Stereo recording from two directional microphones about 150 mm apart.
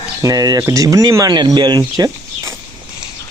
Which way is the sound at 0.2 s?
25° right (ahead or behind).